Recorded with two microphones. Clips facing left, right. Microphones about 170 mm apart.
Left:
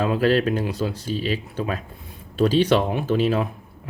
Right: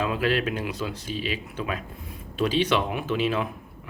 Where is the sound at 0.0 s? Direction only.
35° left (ahead or behind).